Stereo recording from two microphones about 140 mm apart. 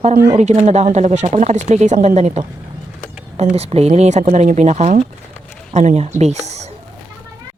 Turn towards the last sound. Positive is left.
turn(degrees=-50)  # may be behind; listen again after turning